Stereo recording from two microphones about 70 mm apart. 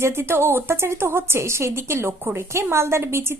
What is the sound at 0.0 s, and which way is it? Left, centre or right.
A woman's voice, right.